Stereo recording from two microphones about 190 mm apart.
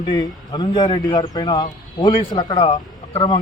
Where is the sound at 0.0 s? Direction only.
20° left (ahead or behind).